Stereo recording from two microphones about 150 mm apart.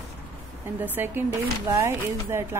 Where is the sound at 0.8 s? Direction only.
15° right (ahead or behind).